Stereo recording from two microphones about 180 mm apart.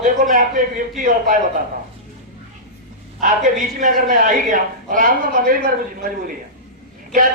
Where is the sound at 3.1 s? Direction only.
45° right (ahead or behind).